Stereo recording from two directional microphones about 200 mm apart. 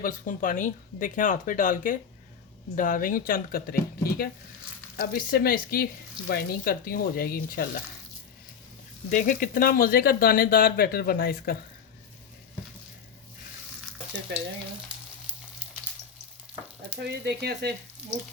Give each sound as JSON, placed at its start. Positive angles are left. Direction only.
{"t": 0.0, "sound": "speech", "side_deg": 40}
{"t": 9.0, "sound": "speech", "side_deg": 40}
{"t": 17.0, "sound": "speech", "side_deg": -55}